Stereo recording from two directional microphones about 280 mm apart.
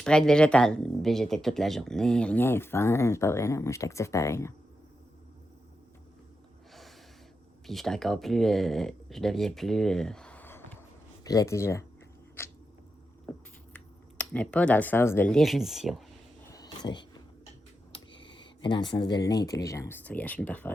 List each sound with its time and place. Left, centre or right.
0.0 s speech: centre
7.7 s speech: centre
12.4 s a sound: centre
13.3 s squish: centre
13.7 s speech: centre
16.5 s a sound: centre
17.9 s speech: centre